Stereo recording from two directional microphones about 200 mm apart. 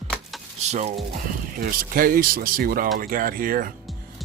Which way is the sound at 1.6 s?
45° right (ahead or behind).